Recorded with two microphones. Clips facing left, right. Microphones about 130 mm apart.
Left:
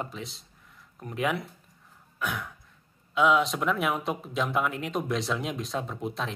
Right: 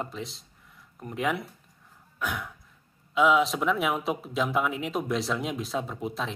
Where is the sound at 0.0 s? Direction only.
Centre (ahead or behind).